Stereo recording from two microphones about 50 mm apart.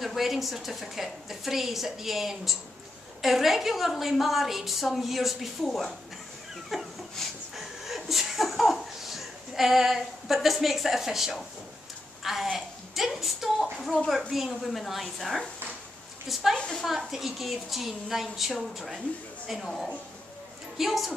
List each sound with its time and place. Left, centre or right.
0.0 s a woman's voice: centre
6.7 s a sound: centre
7.2 s chuckle: centre
12.2 s a woman's voice: centre
16.5 s a woman's voice: centre
16.8 s a woman's voice: centre
20.7 s a woman's voice: centre